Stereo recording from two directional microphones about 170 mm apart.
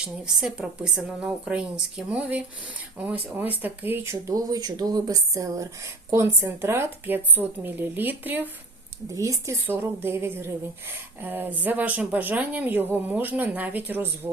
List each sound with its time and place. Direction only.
0.0 s a woman's voice: 5° right (ahead or behind)